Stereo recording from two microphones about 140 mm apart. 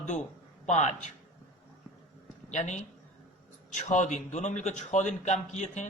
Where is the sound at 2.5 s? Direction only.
55° left (ahead or behind).